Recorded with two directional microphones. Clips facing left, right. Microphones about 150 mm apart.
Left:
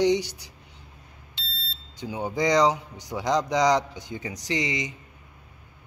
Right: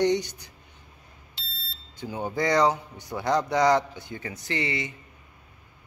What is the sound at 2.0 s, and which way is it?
Speech, 15° left (ahead or behind).